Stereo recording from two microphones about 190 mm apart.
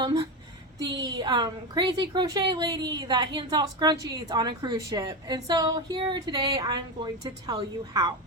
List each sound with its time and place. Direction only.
0.0 s a woman's voice: 25° right (ahead or behind)